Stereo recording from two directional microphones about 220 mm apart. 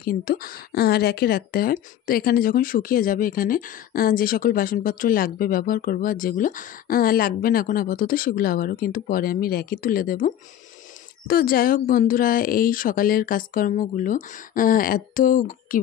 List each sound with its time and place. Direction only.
0.0 s speech: 40° left (ahead or behind)